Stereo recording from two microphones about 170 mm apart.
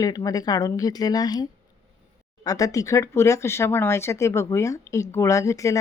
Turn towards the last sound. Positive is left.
turn(degrees=20)  # may be behind; listen again after turning